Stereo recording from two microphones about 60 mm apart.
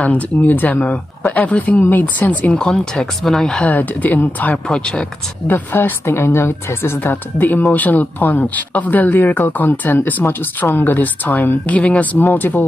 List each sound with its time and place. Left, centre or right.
0.0 s speech: left
2.5 s speech: centre
3.6 s speech: left
4.7 s speech: centre
5.5 s speech: left